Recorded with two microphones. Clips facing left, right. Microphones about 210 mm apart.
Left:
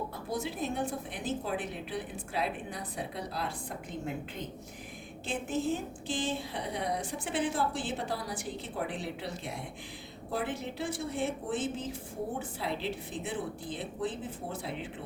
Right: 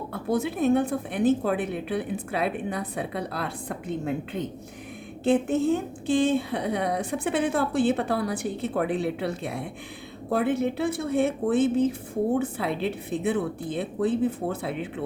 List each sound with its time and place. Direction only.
0.1 s a woman's voice: 60° right (ahead or behind)